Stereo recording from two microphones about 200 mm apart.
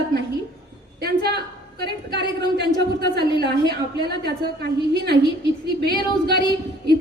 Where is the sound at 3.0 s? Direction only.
55° right (ahead or behind).